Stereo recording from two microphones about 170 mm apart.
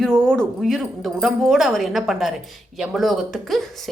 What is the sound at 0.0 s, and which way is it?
A woman's voice, 5° left (ahead or behind).